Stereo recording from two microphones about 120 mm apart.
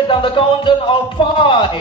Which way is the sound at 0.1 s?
45° left (ahead or behind).